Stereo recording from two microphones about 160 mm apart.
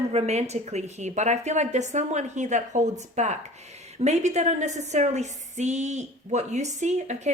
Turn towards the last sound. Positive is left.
turn(degrees=-45)  # may be behind; listen again after turning